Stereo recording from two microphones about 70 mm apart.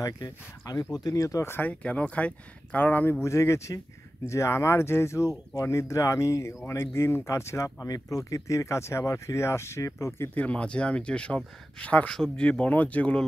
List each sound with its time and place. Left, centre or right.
0.0 s speech: left
1.4 s speech: left
1.7 s speech: centre
3.2 s speech: left
10.3 s speech: centre